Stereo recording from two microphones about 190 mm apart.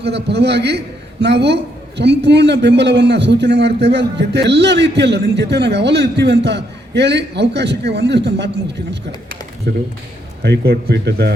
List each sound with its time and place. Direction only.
0.0 s a man's voice: 60° right (ahead or behind)
9.7 s a man's voice: 55° right (ahead or behind)